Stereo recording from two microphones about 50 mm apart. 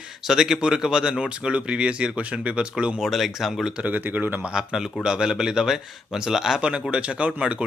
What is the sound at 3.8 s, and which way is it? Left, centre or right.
Speech, right.